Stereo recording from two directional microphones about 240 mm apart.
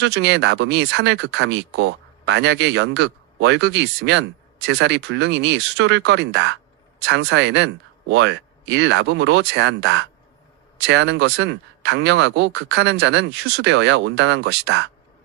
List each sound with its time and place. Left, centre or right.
0.0 s speech: right